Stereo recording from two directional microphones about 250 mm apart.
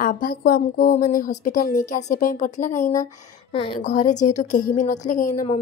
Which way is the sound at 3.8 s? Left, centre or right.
Left.